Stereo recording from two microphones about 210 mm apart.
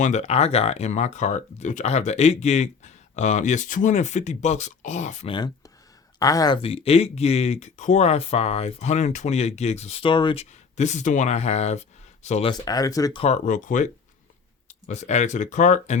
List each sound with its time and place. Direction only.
0.0 s speech: 35° left (ahead or behind)
5.3 s speech: 20° left (ahead or behind)
10.8 s speech: 35° left (ahead or behind); by 13.2 s 15° left (ahead or behind)
13.2 s speech: 35° left (ahead or behind)